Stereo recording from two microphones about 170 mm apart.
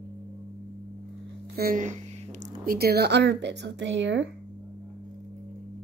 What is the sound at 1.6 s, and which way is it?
Speech, 55° right (ahead or behind).